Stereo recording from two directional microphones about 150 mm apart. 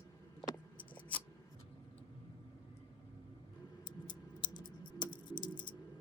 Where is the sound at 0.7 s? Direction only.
10° left (ahead or behind).